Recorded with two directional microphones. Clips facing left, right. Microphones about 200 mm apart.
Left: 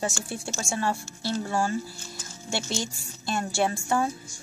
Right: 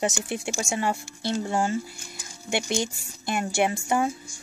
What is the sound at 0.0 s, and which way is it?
Speech, 20° right (ahead or behind).